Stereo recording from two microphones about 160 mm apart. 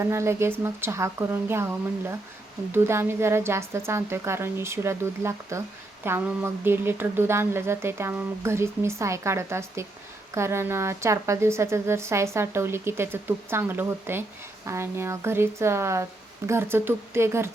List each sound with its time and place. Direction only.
0.0 s a woman's voice: 15° right (ahead or behind)